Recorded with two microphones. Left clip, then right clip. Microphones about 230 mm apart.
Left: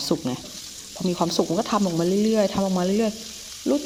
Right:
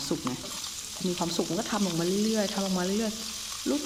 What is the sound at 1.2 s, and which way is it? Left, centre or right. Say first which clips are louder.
Speech: left 9 dB; centre.